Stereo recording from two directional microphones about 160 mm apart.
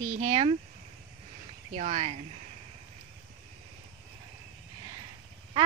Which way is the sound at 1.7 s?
40° right (ahead or behind).